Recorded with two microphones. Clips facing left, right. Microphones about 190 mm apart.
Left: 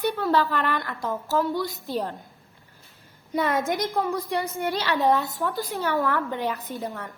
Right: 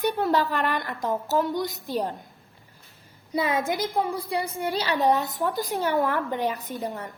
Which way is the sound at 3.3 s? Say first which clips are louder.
Left 1 dB; 10° right (ahead or behind).